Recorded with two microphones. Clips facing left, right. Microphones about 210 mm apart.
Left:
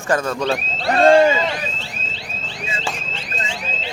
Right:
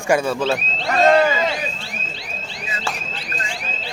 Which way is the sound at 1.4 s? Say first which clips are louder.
Right 1 dB; 10° right (ahead or behind).